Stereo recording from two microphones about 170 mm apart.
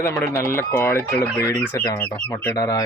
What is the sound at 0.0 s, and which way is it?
Speech, 15° left (ahead or behind).